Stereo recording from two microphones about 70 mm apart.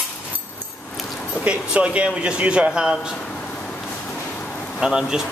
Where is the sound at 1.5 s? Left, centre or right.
Centre.